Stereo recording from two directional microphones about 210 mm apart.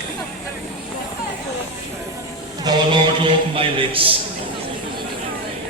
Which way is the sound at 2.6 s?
20° right (ahead or behind).